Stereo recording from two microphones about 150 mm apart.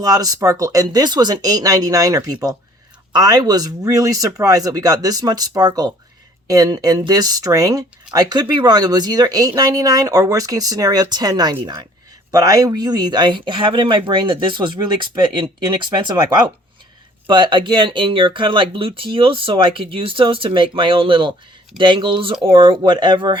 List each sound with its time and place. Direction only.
0.0 s speech: 25° right (ahead or behind)
17.2 s speech: 30° right (ahead or behind)